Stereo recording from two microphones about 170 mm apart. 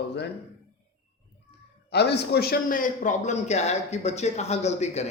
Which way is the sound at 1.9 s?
75° left (ahead or behind).